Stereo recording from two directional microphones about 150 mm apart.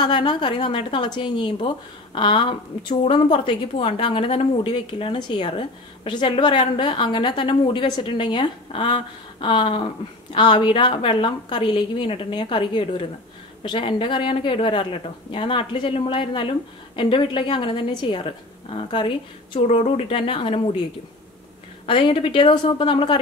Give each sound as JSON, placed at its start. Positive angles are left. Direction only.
{"t": 0.0, "sound": "a woman's voice", "side_deg": 30}
{"t": 21.8, "sound": "a woman's voice", "side_deg": 35}